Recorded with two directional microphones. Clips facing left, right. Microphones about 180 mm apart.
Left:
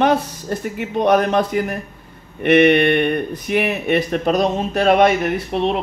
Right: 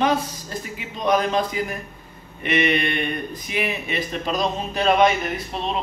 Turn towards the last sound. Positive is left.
turn(degrees=65)  # may be behind; listen again after turning